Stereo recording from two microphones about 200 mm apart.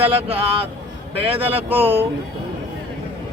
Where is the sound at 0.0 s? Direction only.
30° right (ahead or behind).